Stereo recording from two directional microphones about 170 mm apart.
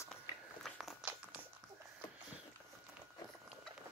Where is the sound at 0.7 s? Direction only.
5° right (ahead or behind).